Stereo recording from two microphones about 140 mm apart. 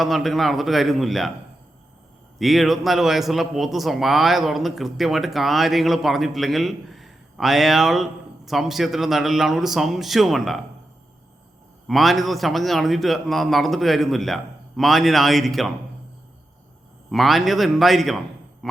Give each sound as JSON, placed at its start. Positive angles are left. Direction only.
{"t": 0.0, "sound": "a man's voice", "side_deg": 0}
{"t": 2.4, "sound": "a man's voice", "side_deg": 0}
{"t": 11.9, "sound": "a man's voice", "side_deg": 0}
{"t": 17.1, "sound": "a man's voice", "side_deg": 0}
{"t": 18.6, "sound": "a sound", "side_deg": 0}